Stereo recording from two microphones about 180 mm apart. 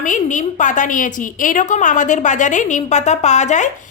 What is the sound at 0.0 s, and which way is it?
A woman's voice, 45° left (ahead or behind).